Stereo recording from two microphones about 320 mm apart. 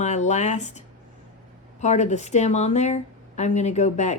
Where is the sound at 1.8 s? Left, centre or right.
Left.